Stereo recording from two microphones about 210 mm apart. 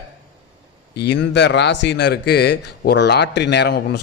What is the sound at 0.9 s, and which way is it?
A man's voice, 55° left (ahead or behind).